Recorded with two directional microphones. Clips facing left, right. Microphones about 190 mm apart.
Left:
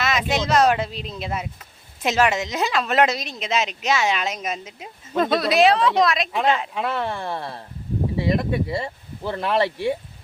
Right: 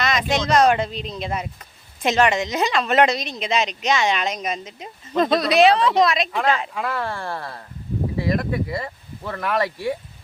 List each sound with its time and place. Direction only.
0.0 s a woman's voice: 5° left (ahead or behind)
6.7 s speech: 25° left (ahead or behind)